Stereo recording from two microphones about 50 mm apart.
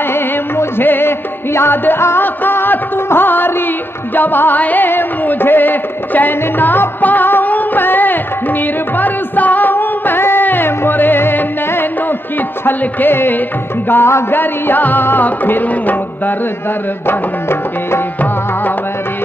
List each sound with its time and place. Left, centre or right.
0.1 s music: left
17.1 s music: left